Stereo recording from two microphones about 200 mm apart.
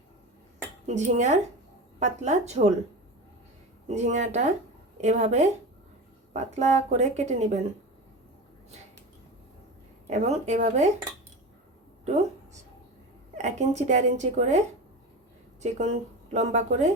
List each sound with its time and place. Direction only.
0.9 s speech: 35° right (ahead or behind)
3.8 s speech: 35° right (ahead or behind)
10.1 s speech: 35° right (ahead or behind)
13.3 s speech: 35° right (ahead or behind)
15.6 s speech: 35° right (ahead or behind)